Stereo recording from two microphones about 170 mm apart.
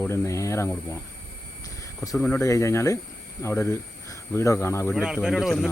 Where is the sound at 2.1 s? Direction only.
5° left (ahead or behind).